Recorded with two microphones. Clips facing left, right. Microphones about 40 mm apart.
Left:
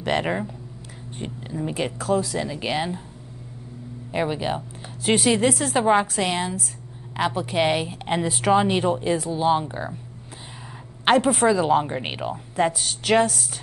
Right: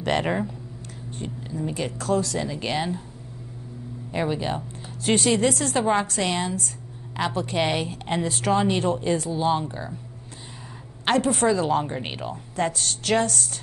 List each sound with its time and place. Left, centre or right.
0.0 s speech: centre
1.1 s speech: left
2.0 s speech: centre
4.1 s speech: centre
11.1 s speech: centre